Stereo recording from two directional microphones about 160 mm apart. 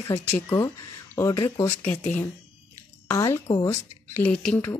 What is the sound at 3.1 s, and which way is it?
Speech, 15° left (ahead or behind).